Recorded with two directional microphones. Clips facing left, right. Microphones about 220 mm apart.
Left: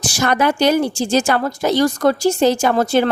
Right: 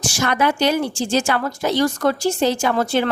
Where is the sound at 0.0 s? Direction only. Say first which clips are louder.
Left 2 dB; 40° left (ahead or behind).